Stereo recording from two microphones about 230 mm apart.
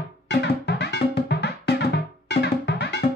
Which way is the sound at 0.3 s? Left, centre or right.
Left.